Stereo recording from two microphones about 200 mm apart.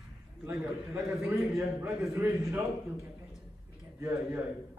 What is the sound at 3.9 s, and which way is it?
Speech, 5° right (ahead or behind).